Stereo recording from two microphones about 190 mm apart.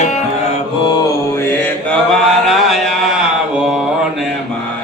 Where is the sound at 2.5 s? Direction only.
Centre (ahead or behind).